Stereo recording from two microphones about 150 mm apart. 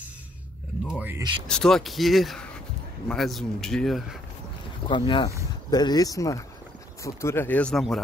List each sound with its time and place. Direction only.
0.9 s a sound: 15° right (ahead or behind)
1.5 s speech: 5° left (ahead or behind)
4.8 s speech: 35° left (ahead or behind); by 8.0 s centre (ahead or behind)